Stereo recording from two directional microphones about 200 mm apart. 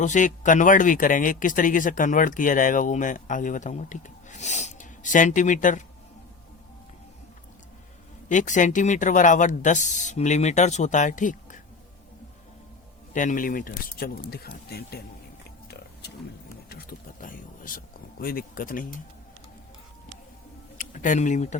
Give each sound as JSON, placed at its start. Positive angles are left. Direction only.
{"t": 0.0, "sound": "speech", "side_deg": 40}
{"t": 8.3, "sound": "speech", "side_deg": 40}
{"t": 13.1, "sound": "speech", "side_deg": 40}
{"t": 15.7, "sound": "pig", "side_deg": 55}
{"t": 16.6, "sound": "a sound", "side_deg": 45}
{"t": 20.7, "sound": "speech", "side_deg": 40}